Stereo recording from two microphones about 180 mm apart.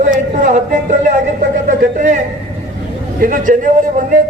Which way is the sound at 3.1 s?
50° right (ahead or behind).